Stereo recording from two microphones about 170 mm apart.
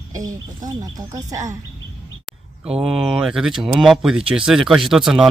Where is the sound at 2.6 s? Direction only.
5° right (ahead or behind).